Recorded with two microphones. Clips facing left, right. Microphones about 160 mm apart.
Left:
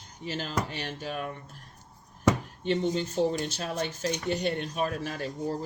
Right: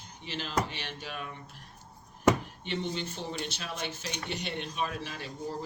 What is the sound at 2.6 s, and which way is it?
Speech, 45° left (ahead or behind).